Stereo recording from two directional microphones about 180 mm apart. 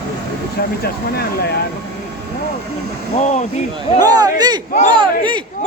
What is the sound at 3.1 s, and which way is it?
Speech, 40° left (ahead or behind).